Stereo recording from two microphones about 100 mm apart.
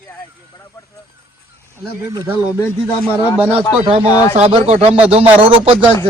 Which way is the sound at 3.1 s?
20° left (ahead or behind).